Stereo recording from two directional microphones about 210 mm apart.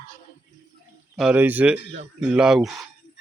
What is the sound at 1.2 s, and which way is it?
Speech, 5° right (ahead or behind).